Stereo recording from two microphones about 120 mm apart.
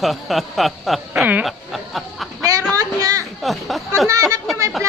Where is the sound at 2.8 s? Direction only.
30° right (ahead or behind).